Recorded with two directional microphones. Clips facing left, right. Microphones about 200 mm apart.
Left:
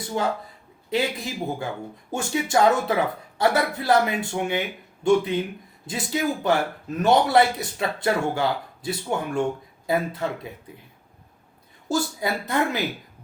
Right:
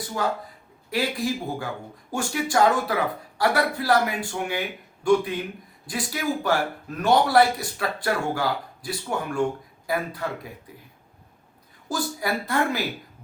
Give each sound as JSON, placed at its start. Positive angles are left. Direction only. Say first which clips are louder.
{"t": 0.1, "sound": "speech", "louder": "left 2 dB", "side_deg": 25}
{"t": 11.9, "sound": "speech", "louder": "left 2 dB", "side_deg": 25}